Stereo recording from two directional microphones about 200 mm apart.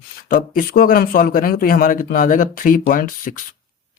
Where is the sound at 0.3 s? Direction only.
45° left (ahead or behind).